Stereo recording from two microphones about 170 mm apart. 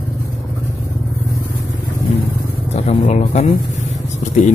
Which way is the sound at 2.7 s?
40° left (ahead or behind).